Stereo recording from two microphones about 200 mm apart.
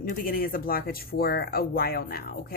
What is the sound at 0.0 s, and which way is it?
Speech, 45° left (ahead or behind).